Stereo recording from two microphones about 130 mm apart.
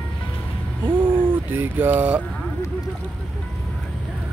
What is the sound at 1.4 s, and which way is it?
Speech, 15° right (ahead or behind).